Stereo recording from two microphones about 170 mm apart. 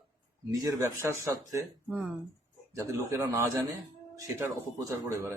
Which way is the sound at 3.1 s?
15° right (ahead or behind).